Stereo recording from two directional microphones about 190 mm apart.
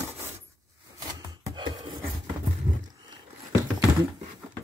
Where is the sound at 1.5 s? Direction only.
25° right (ahead or behind).